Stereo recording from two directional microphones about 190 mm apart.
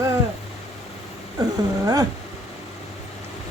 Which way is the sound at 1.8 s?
20° right (ahead or behind).